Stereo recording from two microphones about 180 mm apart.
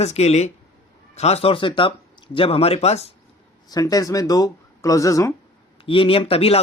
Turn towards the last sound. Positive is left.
turn(degrees=35)  # may be behind; listen again after turning